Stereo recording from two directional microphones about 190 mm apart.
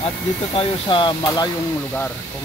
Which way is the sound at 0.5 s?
25° left (ahead or behind).